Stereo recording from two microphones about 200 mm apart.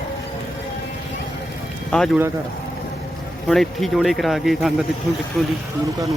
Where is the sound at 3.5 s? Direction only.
Centre (ahead or behind).